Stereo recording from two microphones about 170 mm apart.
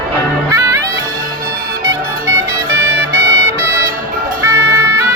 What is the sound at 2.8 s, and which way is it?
Music, 15° right (ahead or behind).